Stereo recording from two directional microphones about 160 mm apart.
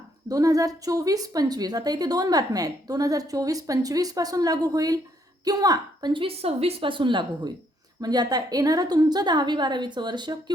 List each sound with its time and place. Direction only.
0.3 s a woman's voice: 20° right (ahead or behind)